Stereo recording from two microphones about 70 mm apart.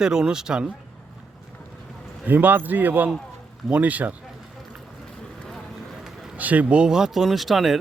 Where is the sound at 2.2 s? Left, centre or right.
Right.